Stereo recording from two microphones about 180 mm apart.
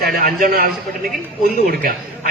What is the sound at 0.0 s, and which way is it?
Speech, 50° right (ahead or behind).